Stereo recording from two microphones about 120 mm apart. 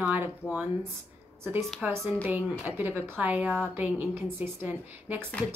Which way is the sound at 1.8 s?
15° right (ahead or behind).